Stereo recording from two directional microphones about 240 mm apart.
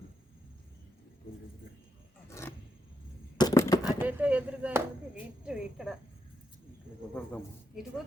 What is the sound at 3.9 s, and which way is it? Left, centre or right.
A woman's voice, centre.